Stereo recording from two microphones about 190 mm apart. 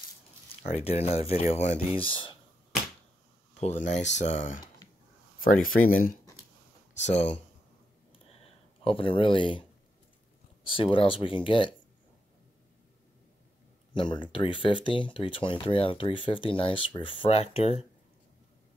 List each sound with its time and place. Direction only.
0.6 s speech: 35° left (ahead or behind)
3.5 s speech: 35° left (ahead or behind)
8.8 s speech: 30° left (ahead or behind)
13.9 s speech: 25° left (ahead or behind)